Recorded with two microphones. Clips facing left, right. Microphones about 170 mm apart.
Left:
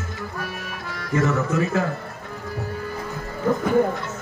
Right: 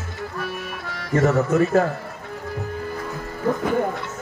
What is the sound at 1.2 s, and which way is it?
Speech, 45° right (ahead or behind).